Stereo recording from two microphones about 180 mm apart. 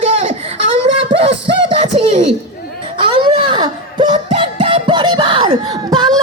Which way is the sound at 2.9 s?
30° right (ahead or behind).